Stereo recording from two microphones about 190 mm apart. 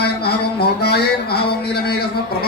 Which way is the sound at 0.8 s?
55° left (ahead or behind).